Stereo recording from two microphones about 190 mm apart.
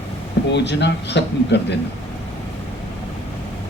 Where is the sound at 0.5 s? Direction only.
65° left (ahead or behind).